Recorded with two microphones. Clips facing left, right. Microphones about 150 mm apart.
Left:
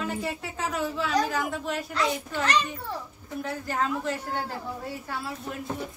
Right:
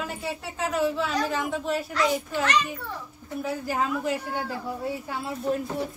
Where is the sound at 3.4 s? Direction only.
10° right (ahead or behind).